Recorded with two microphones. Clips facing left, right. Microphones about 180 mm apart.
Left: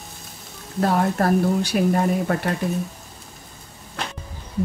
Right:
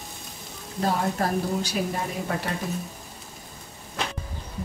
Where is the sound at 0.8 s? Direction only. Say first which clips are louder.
Left 5 dB; 60° left (ahead or behind).